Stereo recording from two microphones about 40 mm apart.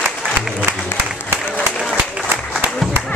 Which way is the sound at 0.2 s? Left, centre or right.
Right.